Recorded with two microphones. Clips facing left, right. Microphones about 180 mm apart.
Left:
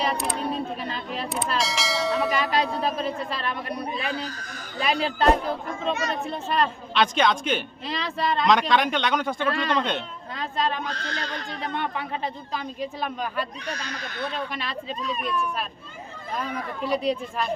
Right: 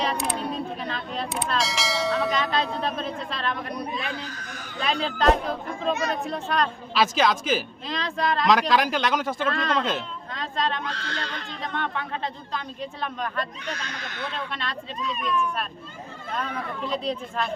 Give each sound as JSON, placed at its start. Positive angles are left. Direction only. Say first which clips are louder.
{"t": 0.0, "sound": "speech", "louder": "even", "side_deg": 5}
{"t": 0.9, "sound": "a sound", "louder": "even", "side_deg": 5}
{"t": 2.5, "sound": "speech", "louder": "left 2 dB", "side_deg": 10}
{"t": 3.9, "sound": "speech", "louder": "left 2 dB", "side_deg": 35}
{"t": 4.8, "sound": "speech", "louder": "left 2 dB", "side_deg": 10}
{"t": 10.9, "sound": "speech", "louder": "left 1 dB", "side_deg": 40}
{"t": 11.8, "sound": "speech", "louder": "right 1 dB", "side_deg": 10}
{"t": 13.7, "sound": "speech", "louder": "left 2 dB", "side_deg": 35}
{"t": 14.5, "sound": "speech", "louder": "even", "side_deg": 5}
{"t": 16.4, "sound": "speech", "louder": "left 1 dB", "side_deg": 10}